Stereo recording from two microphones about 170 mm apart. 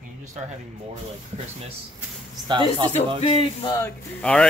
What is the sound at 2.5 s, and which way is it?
Speech, 30° right (ahead or behind).